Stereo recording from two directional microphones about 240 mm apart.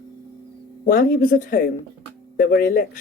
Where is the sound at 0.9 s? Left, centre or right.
Left.